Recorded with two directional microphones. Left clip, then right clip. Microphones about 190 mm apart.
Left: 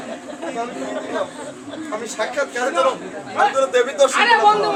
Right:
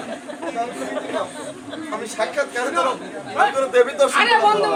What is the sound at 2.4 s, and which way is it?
Speech, 10° left (ahead or behind).